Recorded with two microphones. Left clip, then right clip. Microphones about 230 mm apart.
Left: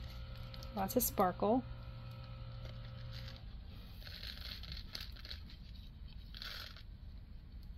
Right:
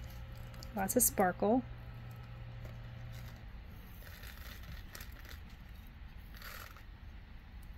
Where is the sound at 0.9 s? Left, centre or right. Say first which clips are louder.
Right 3 dB; centre.